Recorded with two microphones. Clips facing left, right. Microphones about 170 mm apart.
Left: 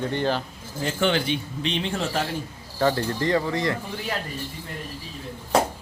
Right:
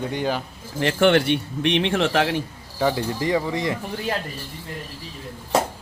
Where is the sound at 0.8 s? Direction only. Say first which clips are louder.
Right 6 dB; 75° right (ahead or behind).